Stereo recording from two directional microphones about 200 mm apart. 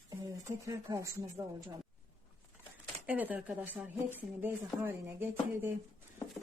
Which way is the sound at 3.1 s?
10° right (ahead or behind).